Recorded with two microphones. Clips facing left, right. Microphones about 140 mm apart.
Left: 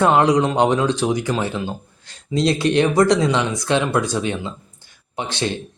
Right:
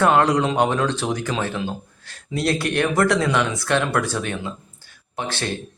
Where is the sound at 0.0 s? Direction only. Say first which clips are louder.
Left 2 dB; 15° left (ahead or behind).